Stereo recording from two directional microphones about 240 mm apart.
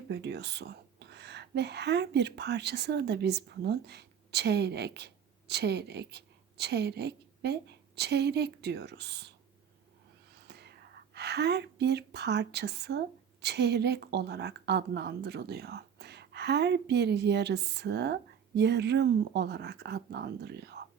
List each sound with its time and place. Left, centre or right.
0.1 s speech: right
10.5 s speech: right